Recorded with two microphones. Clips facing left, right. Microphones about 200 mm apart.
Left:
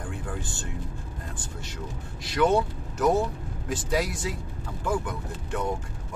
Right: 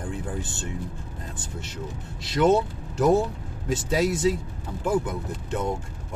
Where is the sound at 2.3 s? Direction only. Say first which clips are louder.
Right 2 dB; 25° right (ahead or behind).